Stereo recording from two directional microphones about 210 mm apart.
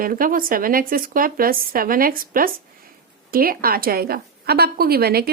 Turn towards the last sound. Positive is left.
turn(degrees=-45)  # may be behind; listen again after turning